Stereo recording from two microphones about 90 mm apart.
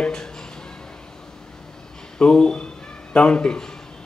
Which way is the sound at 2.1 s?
10° left (ahead or behind).